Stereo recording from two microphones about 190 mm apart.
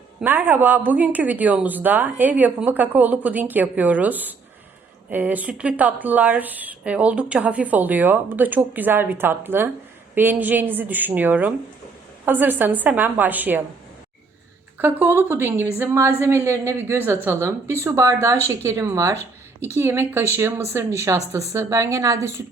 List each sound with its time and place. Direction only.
0.2 s speech: 10° right (ahead or behind)
14.8 s speech: 10° right (ahead or behind)